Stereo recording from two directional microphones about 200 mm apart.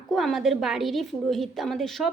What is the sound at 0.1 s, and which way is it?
A woman's voice, centre (ahead or behind).